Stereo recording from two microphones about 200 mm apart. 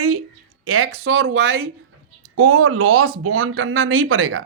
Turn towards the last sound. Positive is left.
turn(degrees=-90)